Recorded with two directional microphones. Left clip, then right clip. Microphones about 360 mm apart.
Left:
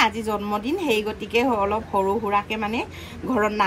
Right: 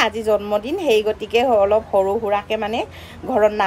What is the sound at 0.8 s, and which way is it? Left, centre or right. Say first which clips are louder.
Speech: right 6 dB; centre.